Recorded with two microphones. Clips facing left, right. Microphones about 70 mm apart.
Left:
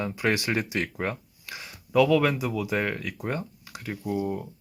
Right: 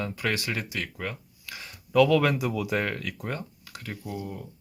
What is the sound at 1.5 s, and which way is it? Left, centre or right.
Speech, centre.